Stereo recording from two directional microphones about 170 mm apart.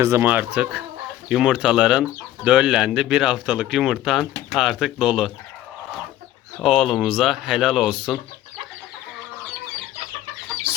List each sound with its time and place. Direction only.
0.0 s speech: 15° right (ahead or behind)
6.6 s speech: centre (ahead or behind)
10.7 s chicken: 30° right (ahead or behind)